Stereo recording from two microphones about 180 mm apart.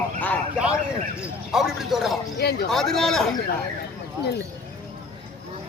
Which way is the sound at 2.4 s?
65° left (ahead or behind).